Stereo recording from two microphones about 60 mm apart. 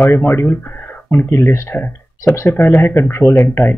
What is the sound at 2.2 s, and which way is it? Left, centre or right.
Speech, left.